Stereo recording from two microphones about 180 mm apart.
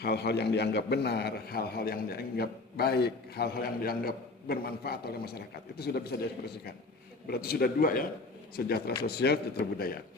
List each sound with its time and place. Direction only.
0.0 s a man's voice: 65° left (ahead or behind)
7.3 s a man's voice: 60° left (ahead or behind)